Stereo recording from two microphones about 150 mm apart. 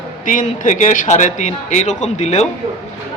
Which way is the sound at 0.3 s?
55° left (ahead or behind).